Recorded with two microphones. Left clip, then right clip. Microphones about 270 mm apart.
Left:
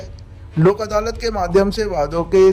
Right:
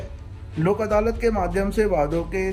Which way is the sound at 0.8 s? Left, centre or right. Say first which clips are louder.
Left 1 dB; left.